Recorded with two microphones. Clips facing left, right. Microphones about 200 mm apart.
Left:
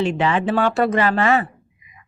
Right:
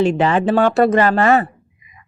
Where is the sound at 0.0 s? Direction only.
45° right (ahead or behind).